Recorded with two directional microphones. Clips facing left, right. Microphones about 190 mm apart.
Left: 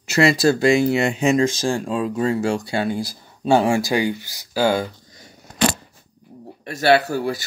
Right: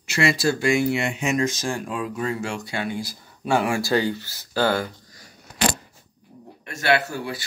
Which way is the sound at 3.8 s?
15° left (ahead or behind).